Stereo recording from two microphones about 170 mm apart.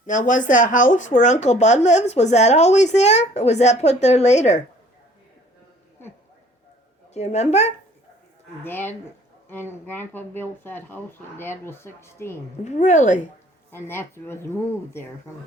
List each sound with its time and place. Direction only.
0.0 s speech: 50° left (ahead or behind)
7.1 s speech: 40° left (ahead or behind)
8.6 s speech: 10° left (ahead or behind)
12.6 s speech: 45° left (ahead or behind)
13.7 s speech: 15° left (ahead or behind)